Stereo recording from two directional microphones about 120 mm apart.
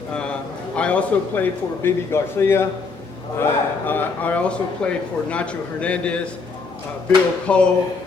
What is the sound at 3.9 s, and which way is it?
A man's voice, 15° left (ahead or behind).